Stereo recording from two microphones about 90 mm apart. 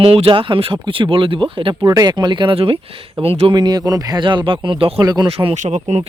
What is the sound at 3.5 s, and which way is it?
Speech, 50° right (ahead or behind).